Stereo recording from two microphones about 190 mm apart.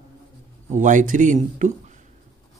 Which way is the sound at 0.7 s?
40° right (ahead or behind).